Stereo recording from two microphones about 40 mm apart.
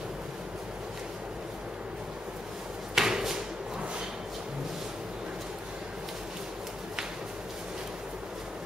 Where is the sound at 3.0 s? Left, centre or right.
Centre.